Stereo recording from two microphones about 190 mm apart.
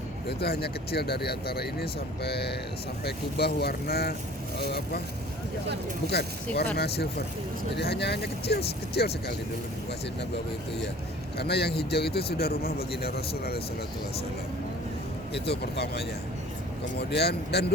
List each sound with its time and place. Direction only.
0.3 s speech: 60° left (ahead or behind)
6.1 s speech: 60° left (ahead or behind)
11.3 s speech: 60° left (ahead or behind)
15.3 s speech: 60° left (ahead or behind)